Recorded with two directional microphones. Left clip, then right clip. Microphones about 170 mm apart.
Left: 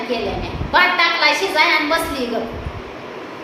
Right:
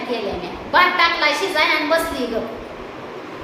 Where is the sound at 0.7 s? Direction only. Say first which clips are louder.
Even; 10° left (ahead or behind).